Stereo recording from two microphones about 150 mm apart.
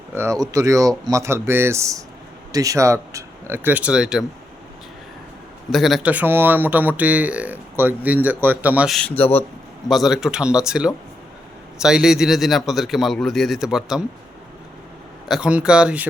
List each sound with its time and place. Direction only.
0.1 s speech: 20° right (ahead or behind)
5.7 s a man's voice: centre (ahead or behind)
6.1 s speech: 10° right (ahead or behind)
9.0 s speech: 10° left (ahead or behind)
9.9 s a man's voice: centre (ahead or behind)
15.3 s a man's voice: 5° right (ahead or behind)